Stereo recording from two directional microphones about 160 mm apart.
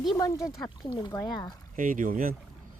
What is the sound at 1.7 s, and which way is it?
Speech, 55° right (ahead or behind).